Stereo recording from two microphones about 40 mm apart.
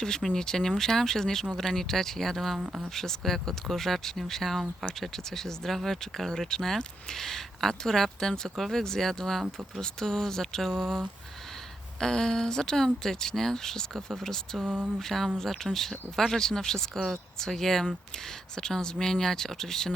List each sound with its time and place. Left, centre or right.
0.2 s speech: centre
2.6 s speech: right
2.9 s speech: centre
14.6 s a sound: right
15.0 s a sound: centre
15.4 s speech: centre